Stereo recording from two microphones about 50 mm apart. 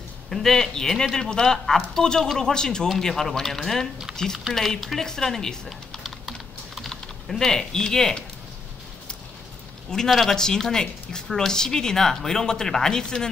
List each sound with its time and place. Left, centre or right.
0.3 s speech: centre
4.6 s speech: centre
6.2 s typing: centre
6.9 s speech: centre
9.8 s a man's voice: centre